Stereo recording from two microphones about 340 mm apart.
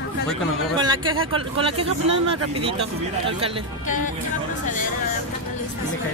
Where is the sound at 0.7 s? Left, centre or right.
Centre.